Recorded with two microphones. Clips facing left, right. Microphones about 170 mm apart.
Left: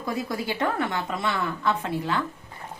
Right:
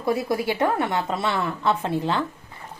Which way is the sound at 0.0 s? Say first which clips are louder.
Right 6 dB; 25° right (ahead or behind).